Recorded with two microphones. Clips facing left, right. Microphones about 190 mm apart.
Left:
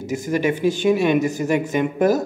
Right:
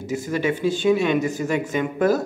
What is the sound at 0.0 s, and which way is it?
Speech, 15° left (ahead or behind).